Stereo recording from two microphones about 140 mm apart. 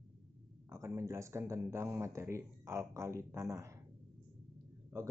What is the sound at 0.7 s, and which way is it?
Speech, 20° right (ahead or behind).